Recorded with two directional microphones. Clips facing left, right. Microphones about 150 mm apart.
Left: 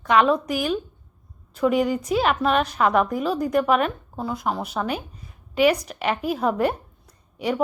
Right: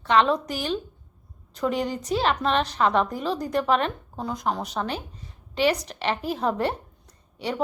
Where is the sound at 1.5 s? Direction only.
10° left (ahead or behind).